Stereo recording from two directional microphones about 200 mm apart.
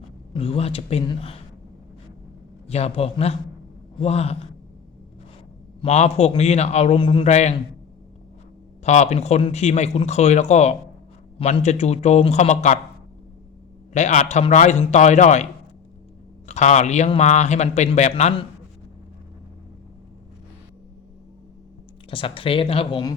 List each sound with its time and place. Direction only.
0.3 s speech: 30° left (ahead or behind)
2.6 s a man's voice: 30° left (ahead or behind)
5.8 s a man's voice: 35° left (ahead or behind)
8.8 s a man's voice: 35° left (ahead or behind)
13.9 s a man's voice: 35° left (ahead or behind)
16.5 s a man's voice: 35° left (ahead or behind)
22.1 s speech: 25° left (ahead or behind)